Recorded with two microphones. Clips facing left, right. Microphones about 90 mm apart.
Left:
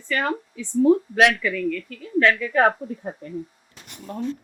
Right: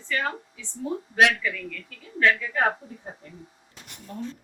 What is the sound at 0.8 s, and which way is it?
Speech, 70° left (ahead or behind).